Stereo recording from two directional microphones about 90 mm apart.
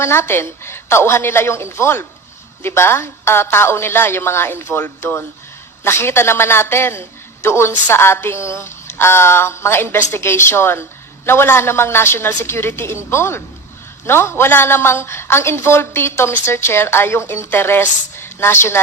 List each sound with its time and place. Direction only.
0.0 s a woman's voice: 25° left (ahead or behind)